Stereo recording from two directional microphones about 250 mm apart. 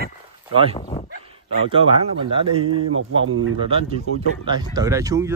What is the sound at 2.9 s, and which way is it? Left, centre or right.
Speech, right.